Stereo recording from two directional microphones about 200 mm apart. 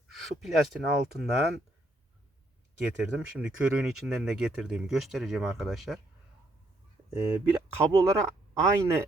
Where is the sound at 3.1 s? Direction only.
5° right (ahead or behind).